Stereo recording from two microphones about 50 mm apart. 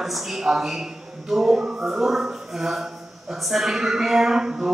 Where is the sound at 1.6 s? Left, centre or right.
Centre.